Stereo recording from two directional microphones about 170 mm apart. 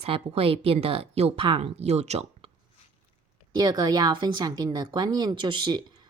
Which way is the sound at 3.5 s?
25° right (ahead or behind).